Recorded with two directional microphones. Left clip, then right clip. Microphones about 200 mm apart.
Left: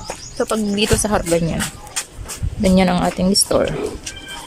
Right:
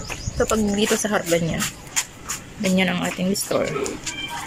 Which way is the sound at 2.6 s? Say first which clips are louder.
Left 6 dB; 15° left (ahead or behind).